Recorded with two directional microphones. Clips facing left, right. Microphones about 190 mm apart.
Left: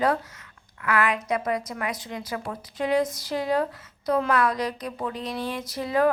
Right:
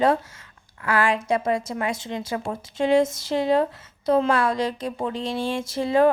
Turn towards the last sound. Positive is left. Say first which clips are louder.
# right 4 dB
turn(degrees=-25)  # may be behind; listen again after turning